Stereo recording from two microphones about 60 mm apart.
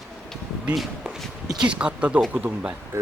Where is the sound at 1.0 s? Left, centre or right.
Centre.